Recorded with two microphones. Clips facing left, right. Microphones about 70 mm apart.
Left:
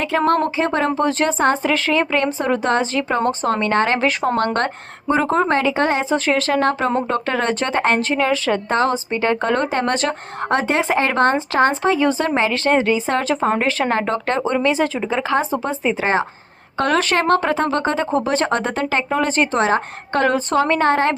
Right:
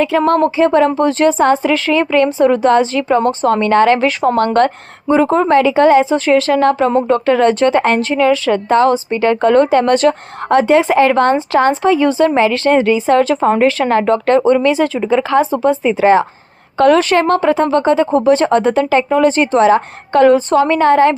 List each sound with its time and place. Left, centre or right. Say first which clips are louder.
0.0 s a woman's voice: right 5 dB; left